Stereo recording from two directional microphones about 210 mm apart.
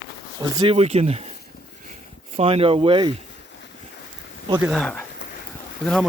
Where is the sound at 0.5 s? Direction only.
20° right (ahead or behind).